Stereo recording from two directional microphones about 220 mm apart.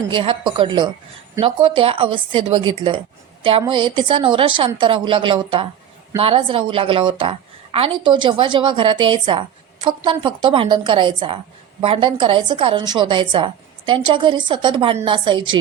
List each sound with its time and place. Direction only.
0.1 s a woman's voice: 25° right (ahead or behind)